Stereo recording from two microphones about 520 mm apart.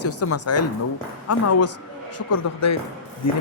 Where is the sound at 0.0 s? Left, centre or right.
Left.